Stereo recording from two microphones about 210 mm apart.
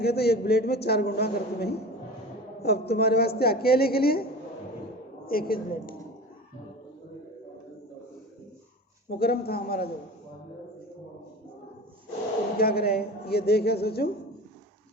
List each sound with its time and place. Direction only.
0.0 s a man's voice: 50° left (ahead or behind)
9.0 s a man's voice: 50° left (ahead or behind)
12.5 s a man's voice: 45° left (ahead or behind)